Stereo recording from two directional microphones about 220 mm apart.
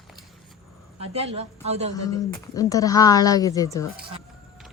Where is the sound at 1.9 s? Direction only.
15° left (ahead or behind).